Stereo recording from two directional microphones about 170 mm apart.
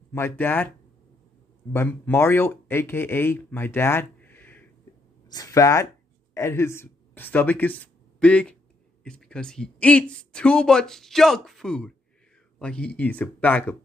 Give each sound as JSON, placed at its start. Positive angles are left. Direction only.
{"t": 0.1, "sound": "speech", "side_deg": 15}